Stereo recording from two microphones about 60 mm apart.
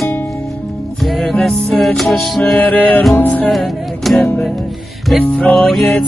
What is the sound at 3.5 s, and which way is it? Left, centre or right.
Music, centre.